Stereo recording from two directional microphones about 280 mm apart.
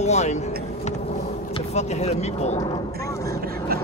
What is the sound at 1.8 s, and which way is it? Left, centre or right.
Speech, left.